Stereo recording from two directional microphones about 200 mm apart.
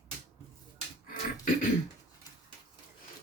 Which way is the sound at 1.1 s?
40° left (ahead or behind).